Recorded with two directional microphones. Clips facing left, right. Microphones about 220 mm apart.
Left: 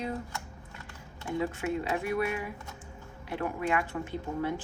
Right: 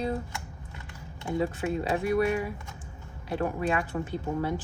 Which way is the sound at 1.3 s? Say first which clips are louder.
Right 2 dB; 35° right (ahead or behind).